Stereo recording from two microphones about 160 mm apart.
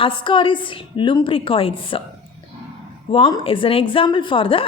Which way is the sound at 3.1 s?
35° left (ahead or behind).